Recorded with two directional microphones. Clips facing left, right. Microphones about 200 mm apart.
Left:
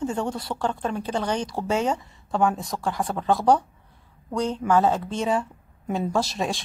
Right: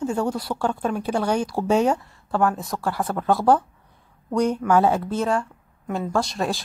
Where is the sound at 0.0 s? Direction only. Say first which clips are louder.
Right 3 dB; 5° right (ahead or behind).